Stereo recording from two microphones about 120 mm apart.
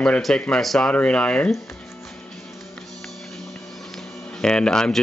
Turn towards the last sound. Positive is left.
turn(degrees=5)  # may be behind; listen again after turning